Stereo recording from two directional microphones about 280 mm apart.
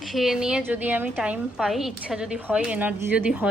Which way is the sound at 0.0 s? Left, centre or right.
Centre.